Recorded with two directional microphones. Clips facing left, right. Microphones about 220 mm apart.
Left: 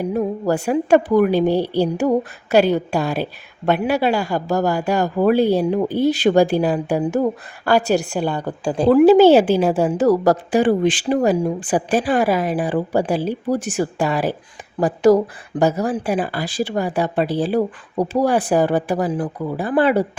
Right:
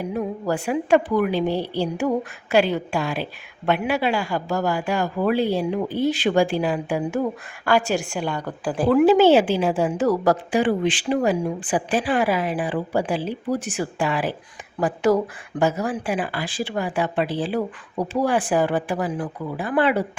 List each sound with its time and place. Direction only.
0.0 s a woman's voice: 40° left (ahead or behind); by 9.0 s 25° left (ahead or behind)
9.0 s a woman's voice: 40° left (ahead or behind)